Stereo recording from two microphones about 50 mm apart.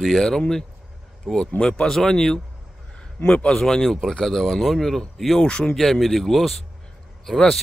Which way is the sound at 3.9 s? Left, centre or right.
Centre.